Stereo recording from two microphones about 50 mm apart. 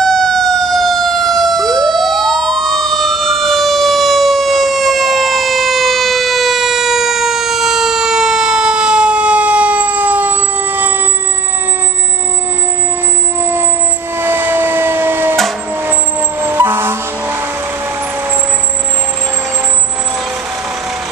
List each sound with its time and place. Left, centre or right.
0.0 s emergency vehicle: centre; by 10.9 s right
14.2 s vehicle: right